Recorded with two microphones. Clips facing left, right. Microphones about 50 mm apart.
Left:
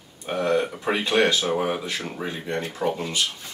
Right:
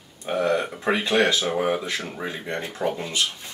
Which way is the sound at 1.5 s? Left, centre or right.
Centre.